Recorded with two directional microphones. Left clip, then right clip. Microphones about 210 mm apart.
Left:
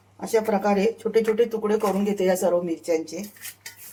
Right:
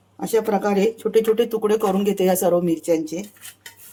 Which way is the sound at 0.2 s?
55° right (ahead or behind).